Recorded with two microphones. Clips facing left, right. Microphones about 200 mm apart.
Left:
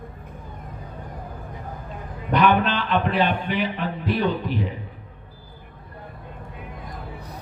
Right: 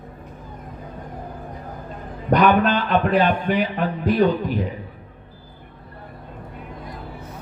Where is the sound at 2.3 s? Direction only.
45° right (ahead or behind).